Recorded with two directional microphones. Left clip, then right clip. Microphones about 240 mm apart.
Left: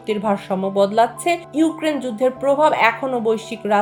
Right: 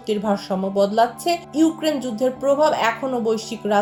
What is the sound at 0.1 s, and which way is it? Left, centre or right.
Speech, left.